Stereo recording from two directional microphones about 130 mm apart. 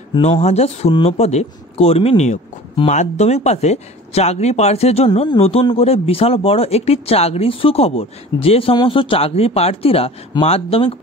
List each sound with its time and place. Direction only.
0.2 s speech: 55° left (ahead or behind)